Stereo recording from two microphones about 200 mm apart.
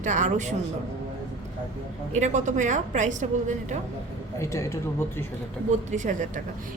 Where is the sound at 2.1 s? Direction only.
35° right (ahead or behind).